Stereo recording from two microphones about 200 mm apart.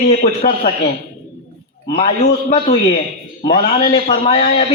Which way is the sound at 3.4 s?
30° left (ahead or behind).